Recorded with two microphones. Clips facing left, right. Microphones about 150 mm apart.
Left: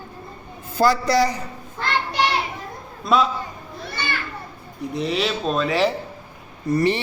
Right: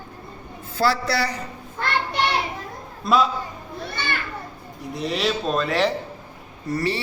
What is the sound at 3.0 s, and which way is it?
Speech, centre (ahead or behind).